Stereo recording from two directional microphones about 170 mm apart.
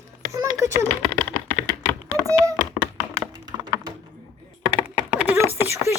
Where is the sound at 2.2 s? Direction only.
20° right (ahead or behind).